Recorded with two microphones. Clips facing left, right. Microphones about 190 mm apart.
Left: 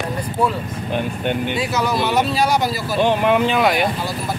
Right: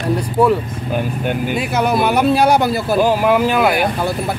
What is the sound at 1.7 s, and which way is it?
Speech, 55° right (ahead or behind).